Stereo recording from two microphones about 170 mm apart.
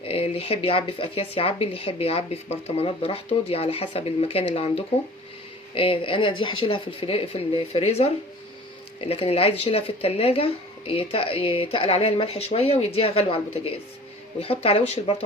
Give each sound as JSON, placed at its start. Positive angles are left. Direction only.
{"t": 0.0, "sound": "speech", "side_deg": 35}
{"t": 5.7, "sound": "speech", "side_deg": 30}